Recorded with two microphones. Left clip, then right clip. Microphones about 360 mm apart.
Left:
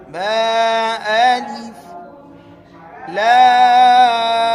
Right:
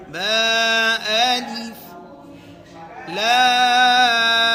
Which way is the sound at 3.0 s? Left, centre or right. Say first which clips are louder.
Left 6 dB; centre.